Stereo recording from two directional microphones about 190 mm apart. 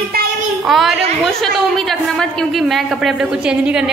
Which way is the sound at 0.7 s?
Centre (ahead or behind).